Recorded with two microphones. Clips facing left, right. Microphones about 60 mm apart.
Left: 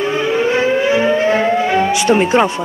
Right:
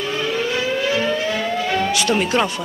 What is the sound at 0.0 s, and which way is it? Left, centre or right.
Civil defense siren, left.